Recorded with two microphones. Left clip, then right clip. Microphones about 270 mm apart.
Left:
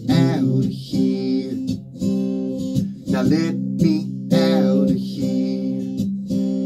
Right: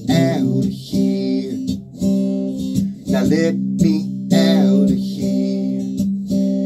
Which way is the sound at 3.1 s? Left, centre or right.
Centre.